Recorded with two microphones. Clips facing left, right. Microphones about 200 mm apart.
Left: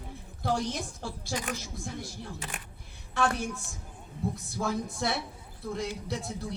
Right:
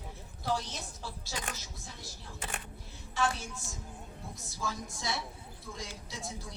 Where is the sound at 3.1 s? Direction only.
60° left (ahead or behind).